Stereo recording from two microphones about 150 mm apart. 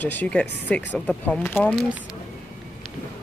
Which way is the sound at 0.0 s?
10° left (ahead or behind).